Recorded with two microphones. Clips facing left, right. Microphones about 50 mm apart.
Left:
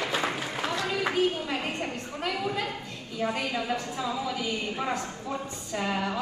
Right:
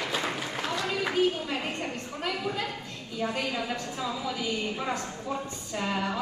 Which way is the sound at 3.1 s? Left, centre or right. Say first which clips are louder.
Left 1 dB; centre.